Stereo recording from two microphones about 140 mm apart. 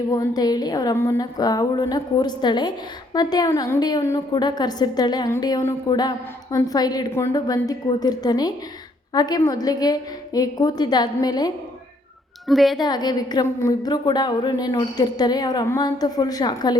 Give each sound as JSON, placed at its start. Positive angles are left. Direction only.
{"t": 0.1, "sound": "a woman's voice", "side_deg": 25}
{"t": 12.5, "sound": "a woman's voice", "side_deg": 0}
{"t": 12.8, "sound": "a woman's voice", "side_deg": 30}